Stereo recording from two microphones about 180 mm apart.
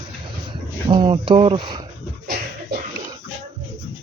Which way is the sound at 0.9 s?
25° right (ahead or behind).